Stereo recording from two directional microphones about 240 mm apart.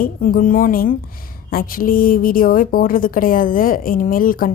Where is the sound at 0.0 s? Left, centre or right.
Left.